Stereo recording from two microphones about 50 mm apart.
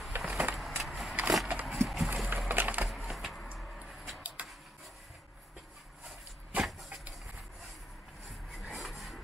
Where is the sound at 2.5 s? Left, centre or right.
Right.